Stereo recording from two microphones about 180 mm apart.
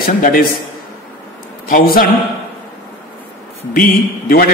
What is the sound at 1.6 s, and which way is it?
Speech, 50° left (ahead or behind).